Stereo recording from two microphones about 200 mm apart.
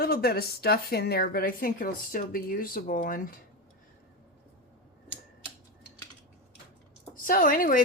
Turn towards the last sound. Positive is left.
turn(degrees=45)  # may be behind; listen again after turning